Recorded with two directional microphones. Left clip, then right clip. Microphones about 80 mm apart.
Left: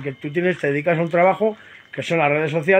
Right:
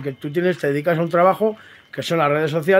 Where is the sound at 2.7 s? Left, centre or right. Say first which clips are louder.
Right 1 dB; right.